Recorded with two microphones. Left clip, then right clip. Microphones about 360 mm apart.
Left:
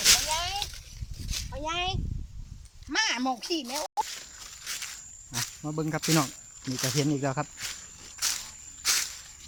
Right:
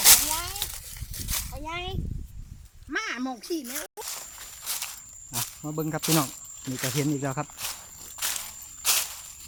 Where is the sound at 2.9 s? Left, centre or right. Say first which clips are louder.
Left 4 dB; left.